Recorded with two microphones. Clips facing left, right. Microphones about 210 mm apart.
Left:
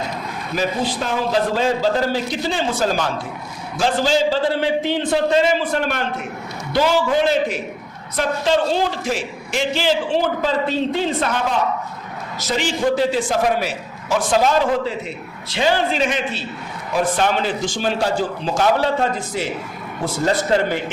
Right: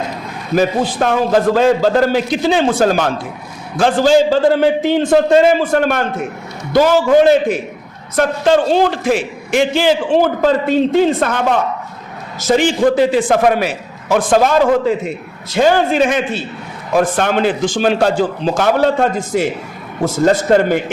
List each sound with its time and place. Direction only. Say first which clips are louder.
0.5 s a man's voice: right 7 dB; 55° right (ahead or behind)
18.8 s a man's voice: right 6 dB; 50° right (ahead or behind)